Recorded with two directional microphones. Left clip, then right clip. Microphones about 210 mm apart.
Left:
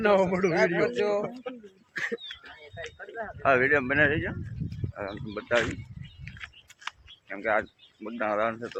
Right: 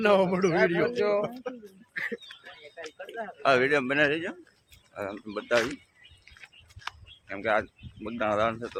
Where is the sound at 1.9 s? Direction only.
40° left (ahead or behind).